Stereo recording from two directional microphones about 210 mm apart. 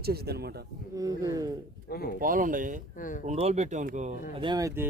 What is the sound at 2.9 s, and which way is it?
Speech, 40° left (ahead or behind).